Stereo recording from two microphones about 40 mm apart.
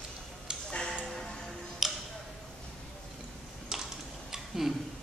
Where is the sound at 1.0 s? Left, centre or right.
Centre.